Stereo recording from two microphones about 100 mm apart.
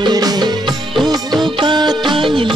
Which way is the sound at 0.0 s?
40° right (ahead or behind).